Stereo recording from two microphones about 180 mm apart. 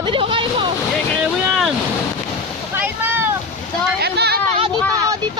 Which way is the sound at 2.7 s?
10° right (ahead or behind).